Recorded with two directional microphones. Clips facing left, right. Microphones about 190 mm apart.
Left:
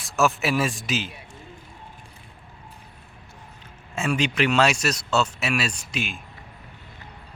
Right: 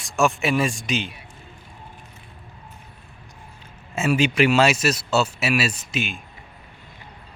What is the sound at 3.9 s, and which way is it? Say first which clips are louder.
Speech: right 4 dB; 5° right (ahead or behind).